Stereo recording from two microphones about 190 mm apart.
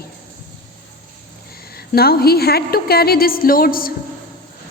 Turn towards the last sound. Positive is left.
turn(degrees=50)  # may be behind; listen again after turning